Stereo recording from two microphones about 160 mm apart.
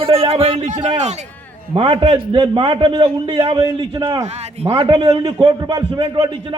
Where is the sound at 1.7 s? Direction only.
30° right (ahead or behind).